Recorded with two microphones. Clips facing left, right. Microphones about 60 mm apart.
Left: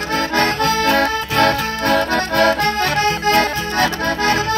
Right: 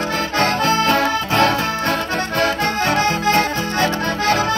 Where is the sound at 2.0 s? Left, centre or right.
Left.